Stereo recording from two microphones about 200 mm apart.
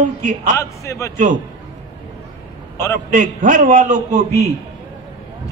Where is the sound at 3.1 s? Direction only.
40° right (ahead or behind).